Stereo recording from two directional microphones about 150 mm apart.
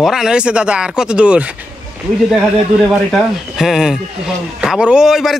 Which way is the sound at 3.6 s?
5° right (ahead or behind).